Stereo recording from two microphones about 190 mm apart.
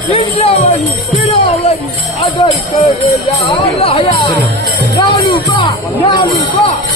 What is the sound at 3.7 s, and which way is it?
Speech, 30° left (ahead or behind).